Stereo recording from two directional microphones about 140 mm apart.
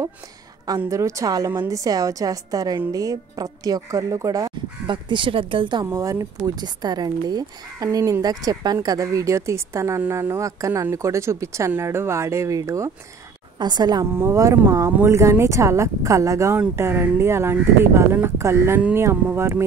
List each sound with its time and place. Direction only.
0.7 s speech: 20° right (ahead or behind)
5.9 s a woman's voice: 25° right (ahead or behind)